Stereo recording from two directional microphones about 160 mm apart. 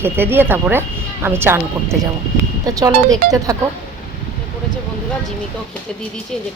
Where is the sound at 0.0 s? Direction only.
15° right (ahead or behind).